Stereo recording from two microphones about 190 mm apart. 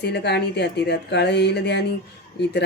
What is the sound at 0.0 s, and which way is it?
Speech, 60° left (ahead or behind).